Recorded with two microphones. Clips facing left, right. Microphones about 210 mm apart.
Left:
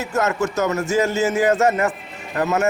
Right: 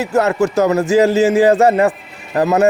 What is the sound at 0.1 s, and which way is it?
A man's voice, 35° right (ahead or behind).